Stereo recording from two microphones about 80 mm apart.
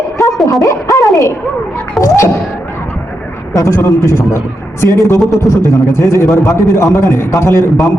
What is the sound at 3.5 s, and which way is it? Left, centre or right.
A man's voice, left.